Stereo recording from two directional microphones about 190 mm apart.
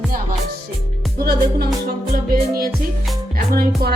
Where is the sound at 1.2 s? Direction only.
55° right (ahead or behind).